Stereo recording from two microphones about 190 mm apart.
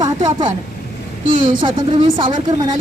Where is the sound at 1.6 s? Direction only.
25° right (ahead or behind).